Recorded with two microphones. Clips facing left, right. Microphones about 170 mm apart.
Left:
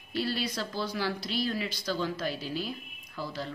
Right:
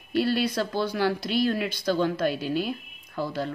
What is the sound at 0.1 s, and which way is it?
A woman's voice, 55° right (ahead or behind).